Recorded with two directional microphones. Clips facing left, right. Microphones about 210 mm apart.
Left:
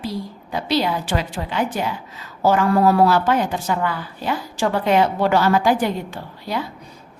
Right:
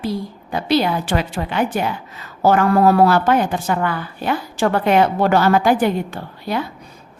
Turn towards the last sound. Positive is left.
turn(degrees=-55)  # may be behind; listen again after turning